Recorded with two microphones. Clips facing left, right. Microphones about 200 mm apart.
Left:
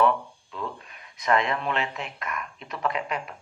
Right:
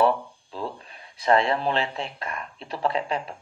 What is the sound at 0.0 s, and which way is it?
Speech, 30° right (ahead or behind).